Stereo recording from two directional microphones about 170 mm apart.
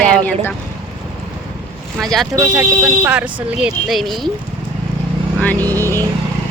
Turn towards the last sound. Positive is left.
turn(degrees=-20)  # may be behind; listen again after turning